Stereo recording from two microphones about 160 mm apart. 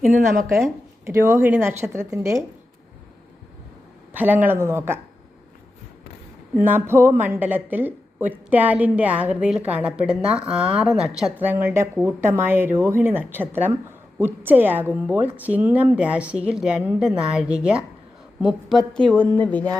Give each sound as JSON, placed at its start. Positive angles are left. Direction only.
{"t": 1.0, "sound": "a woman's voice", "side_deg": -20}
{"t": 4.1, "sound": "a woman's voice", "side_deg": -10}
{"t": 6.6, "sound": "a woman's voice", "side_deg": -15}
{"t": 19.4, "sound": "a sound", "side_deg": 10}